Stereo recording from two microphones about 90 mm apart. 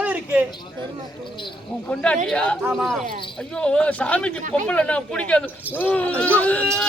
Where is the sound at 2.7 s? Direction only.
Centre (ahead or behind).